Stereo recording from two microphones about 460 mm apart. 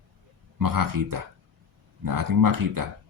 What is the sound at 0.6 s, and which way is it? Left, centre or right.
Speech, right.